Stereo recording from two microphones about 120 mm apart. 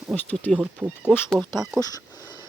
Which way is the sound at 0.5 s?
10° right (ahead or behind).